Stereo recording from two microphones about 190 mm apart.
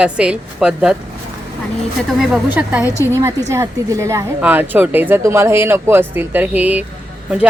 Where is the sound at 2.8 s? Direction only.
15° left (ahead or behind).